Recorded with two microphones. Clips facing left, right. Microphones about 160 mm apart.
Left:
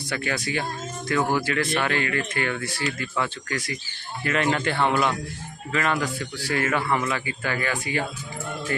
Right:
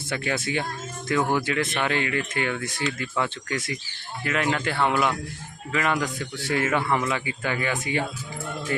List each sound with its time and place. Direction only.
0.1 s speech: 25° right (ahead or behind)
4.2 s speech: 5° right (ahead or behind); by 6.7 s 25° right (ahead or behind)
6.8 s speech: 10° right (ahead or behind)